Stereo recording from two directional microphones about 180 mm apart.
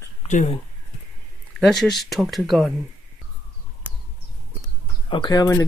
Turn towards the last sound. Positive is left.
turn(degrees=20)  # may be behind; listen again after turning